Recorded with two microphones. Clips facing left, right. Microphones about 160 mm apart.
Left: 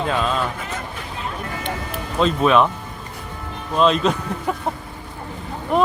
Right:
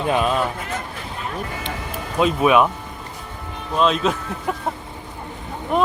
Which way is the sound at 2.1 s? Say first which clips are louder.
Even; 10° right (ahead or behind).